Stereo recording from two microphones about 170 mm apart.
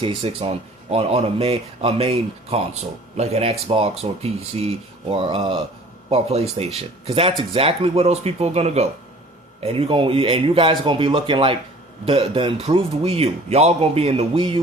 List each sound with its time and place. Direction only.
0.0 s speech: 35° right (ahead or behind)